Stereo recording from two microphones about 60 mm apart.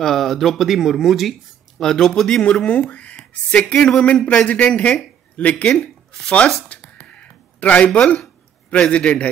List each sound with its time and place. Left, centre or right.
0.0 s speech: centre
1.8 s speech: centre
2.4 s a man's voice: centre
2.9 s a sound: left
3.2 s speech: centre
6.7 s a sound: centre
8.6 s a man's voice: left